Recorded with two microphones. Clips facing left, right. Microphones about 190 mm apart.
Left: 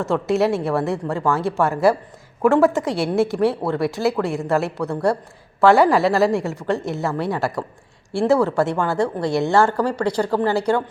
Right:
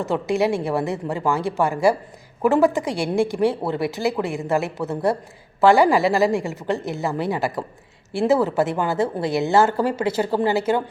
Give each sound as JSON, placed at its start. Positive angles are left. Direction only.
{"t": 0.0, "sound": "a woman's voice", "side_deg": 0}
{"t": 9.6, "sound": "speech", "side_deg": -20}
{"t": 9.9, "sound": "a woman's voice", "side_deg": -5}